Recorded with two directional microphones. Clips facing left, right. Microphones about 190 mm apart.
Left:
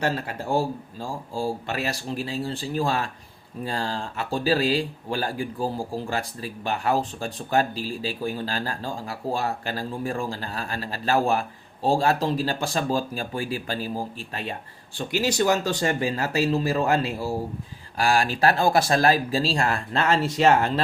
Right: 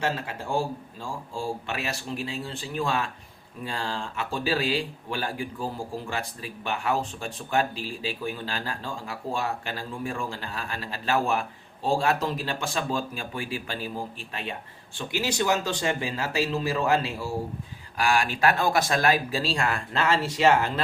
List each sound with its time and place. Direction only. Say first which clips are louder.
0.0 s speech: left 3 dB; 40° left (ahead or behind)